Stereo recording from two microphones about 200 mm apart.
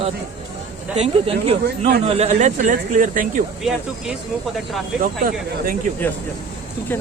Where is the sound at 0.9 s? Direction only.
30° right (ahead or behind).